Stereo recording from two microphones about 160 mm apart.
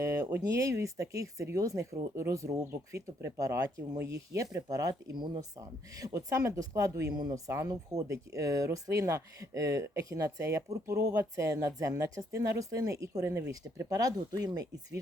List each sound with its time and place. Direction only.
0.0 s speech: 20° right (ahead or behind)